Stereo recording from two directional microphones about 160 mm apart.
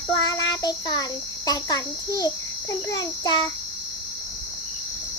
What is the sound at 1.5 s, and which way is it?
A child's voice, 25° left (ahead or behind).